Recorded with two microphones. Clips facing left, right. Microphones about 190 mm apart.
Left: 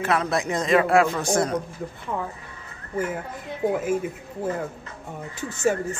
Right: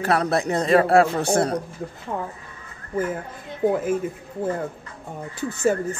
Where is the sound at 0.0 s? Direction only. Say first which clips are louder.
Right 2 dB; 35° right (ahead or behind).